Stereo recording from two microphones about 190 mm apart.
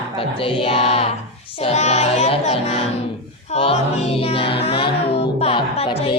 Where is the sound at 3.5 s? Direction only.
30° left (ahead or behind).